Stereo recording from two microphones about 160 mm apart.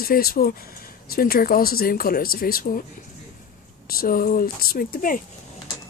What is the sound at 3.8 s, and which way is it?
Speech, 65° left (ahead or behind).